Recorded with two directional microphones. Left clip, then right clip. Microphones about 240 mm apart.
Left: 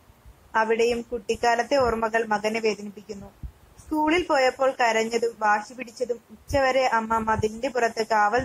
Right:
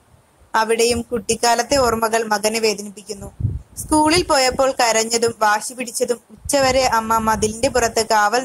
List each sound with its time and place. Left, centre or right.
0.5 s speech: right